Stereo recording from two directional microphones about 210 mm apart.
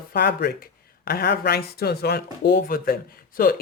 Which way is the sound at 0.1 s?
50° left (ahead or behind).